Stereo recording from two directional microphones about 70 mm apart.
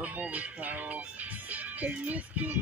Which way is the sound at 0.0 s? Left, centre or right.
Right.